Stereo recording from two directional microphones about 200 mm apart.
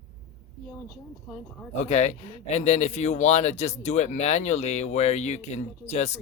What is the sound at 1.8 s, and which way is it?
A man's voice, 35° left (ahead or behind).